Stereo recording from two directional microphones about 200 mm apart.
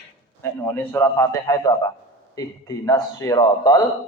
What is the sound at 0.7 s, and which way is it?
A man's voice, 10° left (ahead or behind).